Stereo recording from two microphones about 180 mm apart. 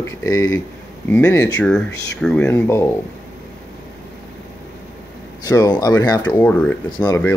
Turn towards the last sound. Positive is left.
turn(degrees=25)  # may be behind; listen again after turning